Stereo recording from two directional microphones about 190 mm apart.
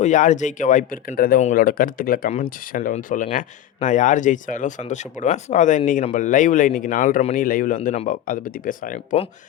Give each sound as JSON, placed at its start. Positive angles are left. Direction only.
{"t": 0.0, "sound": "speech", "side_deg": 40}